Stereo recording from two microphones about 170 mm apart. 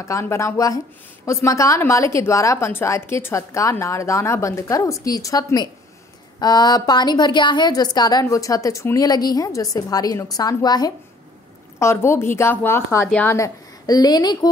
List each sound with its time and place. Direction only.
0.0 s a woman's voice: 15° left (ahead or behind)